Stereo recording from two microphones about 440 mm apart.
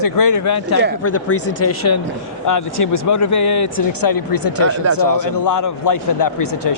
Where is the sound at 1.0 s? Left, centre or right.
Left.